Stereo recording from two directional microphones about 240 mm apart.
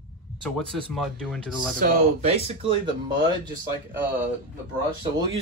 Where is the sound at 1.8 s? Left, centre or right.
Right.